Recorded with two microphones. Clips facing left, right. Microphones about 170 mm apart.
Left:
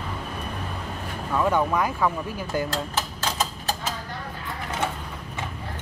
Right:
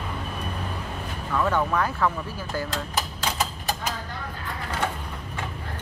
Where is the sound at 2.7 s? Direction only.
15° right (ahead or behind).